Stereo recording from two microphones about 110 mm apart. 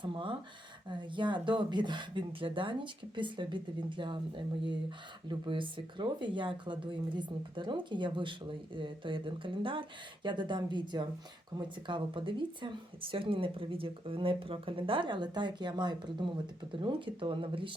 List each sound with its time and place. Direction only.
0.0 s speech: 50° right (ahead or behind)